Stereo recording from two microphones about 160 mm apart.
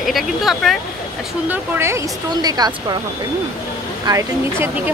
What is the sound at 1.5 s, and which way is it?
Speech, 15° right (ahead or behind).